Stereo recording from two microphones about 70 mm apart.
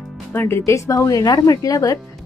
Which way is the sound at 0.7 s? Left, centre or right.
Left.